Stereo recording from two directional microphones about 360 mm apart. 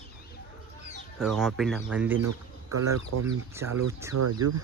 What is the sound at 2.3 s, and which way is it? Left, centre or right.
Speech, right.